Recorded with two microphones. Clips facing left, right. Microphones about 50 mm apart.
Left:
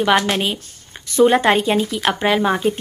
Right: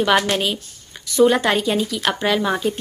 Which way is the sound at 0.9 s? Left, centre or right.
Left.